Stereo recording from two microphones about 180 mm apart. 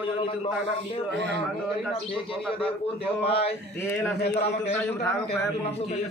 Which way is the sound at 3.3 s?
35° left (ahead or behind).